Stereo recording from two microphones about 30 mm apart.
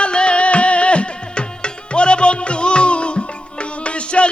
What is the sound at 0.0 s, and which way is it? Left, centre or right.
Music, left.